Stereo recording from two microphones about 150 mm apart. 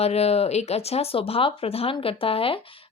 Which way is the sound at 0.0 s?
45° left (ahead or behind).